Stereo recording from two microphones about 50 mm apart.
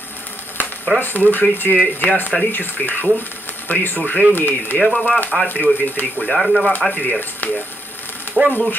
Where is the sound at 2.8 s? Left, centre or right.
Left.